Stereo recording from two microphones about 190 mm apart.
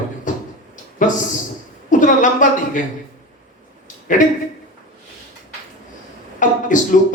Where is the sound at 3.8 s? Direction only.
40° left (ahead or behind).